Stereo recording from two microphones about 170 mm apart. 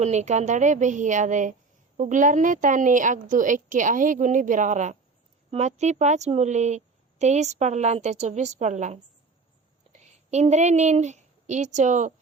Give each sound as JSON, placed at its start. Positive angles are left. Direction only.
{"t": 0.0, "sound": "a woman's voice", "side_deg": -40}